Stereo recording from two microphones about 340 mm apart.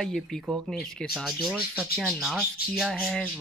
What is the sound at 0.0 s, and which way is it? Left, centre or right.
Speech, centre.